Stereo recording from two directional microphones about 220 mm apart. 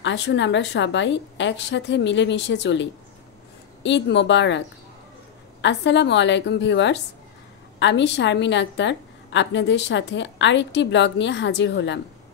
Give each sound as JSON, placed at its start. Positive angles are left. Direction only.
{"t": 0.0, "sound": "a woman's voice", "side_deg": 55}